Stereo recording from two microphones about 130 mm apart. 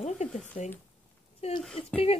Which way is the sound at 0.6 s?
70° left (ahead or behind).